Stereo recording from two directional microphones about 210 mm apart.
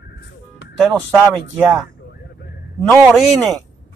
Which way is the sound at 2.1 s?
50° left (ahead or behind).